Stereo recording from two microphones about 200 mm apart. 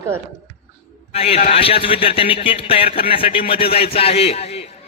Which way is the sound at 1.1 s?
30° left (ahead or behind).